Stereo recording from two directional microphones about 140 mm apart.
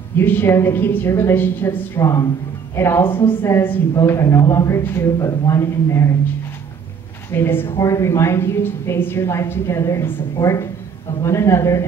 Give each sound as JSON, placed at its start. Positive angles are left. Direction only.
{"t": 0.2, "sound": "a woman's voice", "side_deg": 15}
{"t": 7.2, "sound": "a woman's voice", "side_deg": 15}